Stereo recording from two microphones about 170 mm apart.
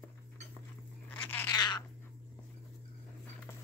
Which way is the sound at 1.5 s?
25° left (ahead or behind).